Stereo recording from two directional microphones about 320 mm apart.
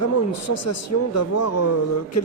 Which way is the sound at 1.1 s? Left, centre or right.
Left.